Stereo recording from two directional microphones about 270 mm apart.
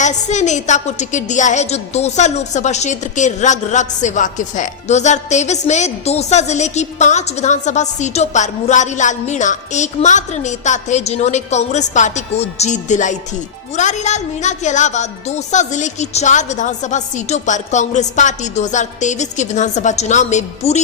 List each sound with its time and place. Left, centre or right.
0.0 s a woman's voice: left